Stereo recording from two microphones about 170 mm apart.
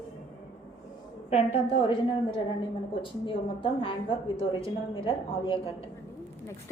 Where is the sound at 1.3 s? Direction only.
35° left (ahead or behind).